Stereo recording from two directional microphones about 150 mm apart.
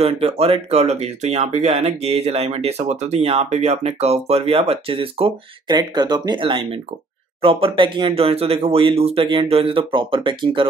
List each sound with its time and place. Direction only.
0.0 s speech: 40° right (ahead or behind)